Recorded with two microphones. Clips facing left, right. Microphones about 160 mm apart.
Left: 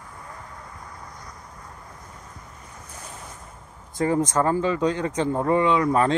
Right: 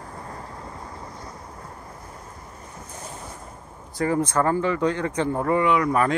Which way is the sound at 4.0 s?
20° left (ahead or behind).